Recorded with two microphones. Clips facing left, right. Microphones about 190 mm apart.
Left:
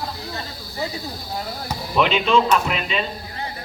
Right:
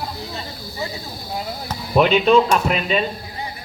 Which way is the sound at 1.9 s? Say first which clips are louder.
Right 5 dB; 45° right (ahead or behind).